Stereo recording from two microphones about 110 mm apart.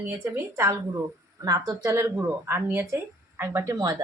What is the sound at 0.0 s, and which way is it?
A woman's voice, 20° right (ahead or behind).